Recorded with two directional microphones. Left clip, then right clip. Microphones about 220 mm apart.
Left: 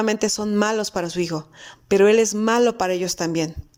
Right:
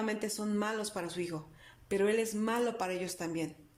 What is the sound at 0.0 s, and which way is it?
Speech, 30° left (ahead or behind).